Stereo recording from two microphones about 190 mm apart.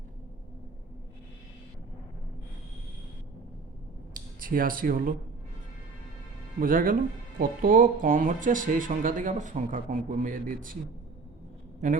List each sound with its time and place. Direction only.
4.4 s speech: 45° right (ahead or behind)
6.6 s speech: 45° right (ahead or behind)